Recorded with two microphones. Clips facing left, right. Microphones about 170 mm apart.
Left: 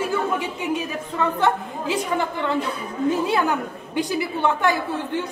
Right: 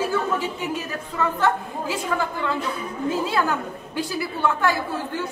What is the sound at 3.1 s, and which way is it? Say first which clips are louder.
A woman's voice: left 1 dB; 20° left (ahead or behind).